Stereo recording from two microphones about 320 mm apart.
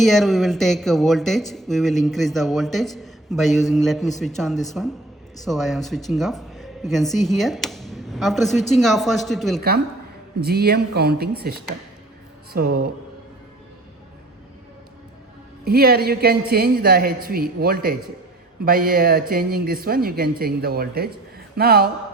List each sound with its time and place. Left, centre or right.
0.0 s speech: centre
9.6 s a man's voice: right
15.6 s a man's voice: right
21.5 s a sound: right